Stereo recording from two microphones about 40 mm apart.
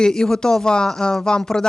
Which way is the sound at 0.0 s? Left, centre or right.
Centre.